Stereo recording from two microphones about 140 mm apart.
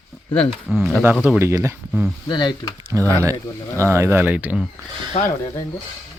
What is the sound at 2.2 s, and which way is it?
Speech, 30° left (ahead or behind).